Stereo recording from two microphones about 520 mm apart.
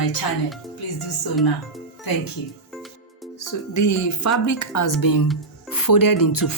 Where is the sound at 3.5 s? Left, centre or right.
Left.